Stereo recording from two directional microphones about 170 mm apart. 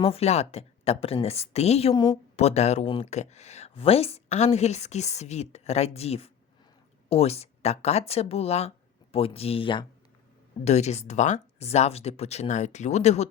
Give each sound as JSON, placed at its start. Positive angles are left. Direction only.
{"t": 0.0, "sound": "speech", "side_deg": 35}